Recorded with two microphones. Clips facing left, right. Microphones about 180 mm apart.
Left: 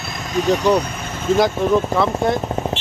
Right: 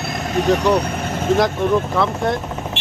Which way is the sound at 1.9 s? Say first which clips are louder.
Left 1 dB; centre (ahead or behind).